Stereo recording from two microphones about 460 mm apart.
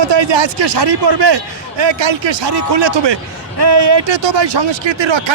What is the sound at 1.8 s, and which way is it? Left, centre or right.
A man's voice, right.